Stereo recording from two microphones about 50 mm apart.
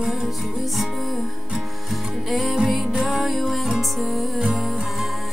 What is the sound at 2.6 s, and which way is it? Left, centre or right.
Music, centre.